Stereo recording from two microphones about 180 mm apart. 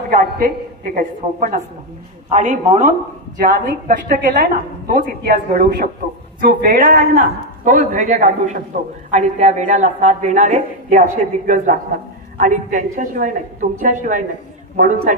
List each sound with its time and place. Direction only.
0.1 s a woman's voice: 55° right (ahead or behind)